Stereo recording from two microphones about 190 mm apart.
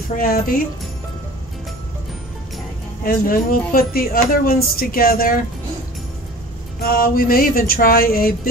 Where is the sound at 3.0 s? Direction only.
50° left (ahead or behind).